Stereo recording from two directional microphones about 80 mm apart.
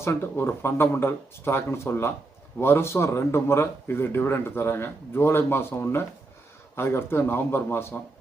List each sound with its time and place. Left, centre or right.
0.0 s a man's voice: left